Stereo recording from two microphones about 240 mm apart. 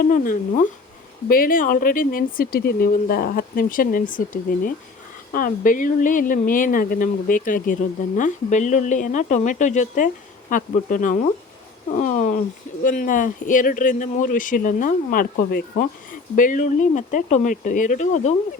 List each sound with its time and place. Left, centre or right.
0.0 s speech: left